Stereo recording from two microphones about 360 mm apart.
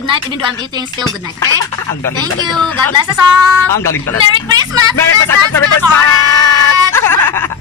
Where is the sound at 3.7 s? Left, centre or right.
Centre.